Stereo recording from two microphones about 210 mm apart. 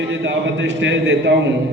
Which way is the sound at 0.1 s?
60° right (ahead or behind).